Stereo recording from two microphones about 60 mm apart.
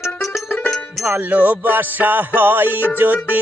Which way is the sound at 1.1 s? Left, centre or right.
Right.